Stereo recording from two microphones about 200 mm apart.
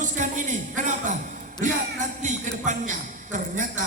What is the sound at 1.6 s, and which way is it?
Music, 40° right (ahead or behind).